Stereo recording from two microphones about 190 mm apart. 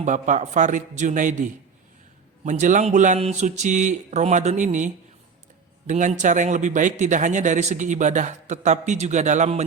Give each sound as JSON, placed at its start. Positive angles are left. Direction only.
{"t": 0.0, "sound": "a man's voice", "side_deg": -40}
{"t": 5.9, "sound": "a man's voice", "side_deg": -40}